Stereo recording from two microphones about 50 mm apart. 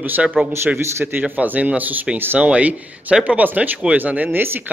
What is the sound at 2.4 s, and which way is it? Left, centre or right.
A man's voice, right.